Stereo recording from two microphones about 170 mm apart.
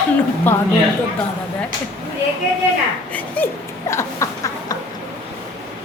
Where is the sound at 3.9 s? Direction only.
15° left (ahead or behind).